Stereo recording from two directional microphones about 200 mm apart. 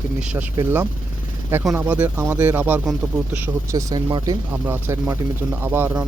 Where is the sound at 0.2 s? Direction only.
5° right (ahead or behind).